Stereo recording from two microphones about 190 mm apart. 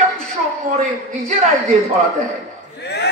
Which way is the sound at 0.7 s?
45° right (ahead or behind).